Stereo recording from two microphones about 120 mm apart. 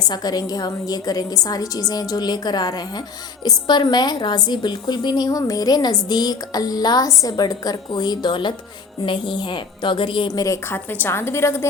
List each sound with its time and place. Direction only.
0.0 s a woman's voice: 35° left (ahead or behind)
10.2 s a woman's voice: 30° left (ahead or behind)